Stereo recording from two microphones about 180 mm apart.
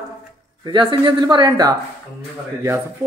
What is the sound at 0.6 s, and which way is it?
Speech, 25° right (ahead or behind).